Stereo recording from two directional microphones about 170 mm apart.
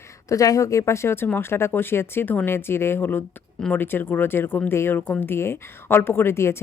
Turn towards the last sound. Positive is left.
turn(degrees=15)  # may be behind; listen again after turning